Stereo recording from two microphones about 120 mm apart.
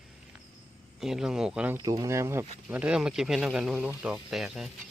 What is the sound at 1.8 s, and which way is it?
Speech, 30° right (ahead or behind).